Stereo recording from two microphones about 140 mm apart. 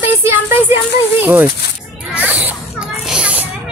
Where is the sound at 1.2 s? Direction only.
15° right (ahead or behind).